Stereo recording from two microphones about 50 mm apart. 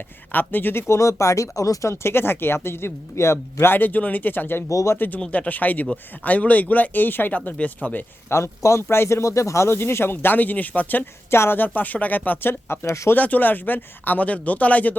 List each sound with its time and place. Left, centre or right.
0.3 s speech: left
0.9 s speech: left
3.7 s speech: left
4.7 s speech: left
4.9 s speech: left
8.3 s speech: left
9.2 s speech: left
11.3 s speech: left
13.1 s speech: left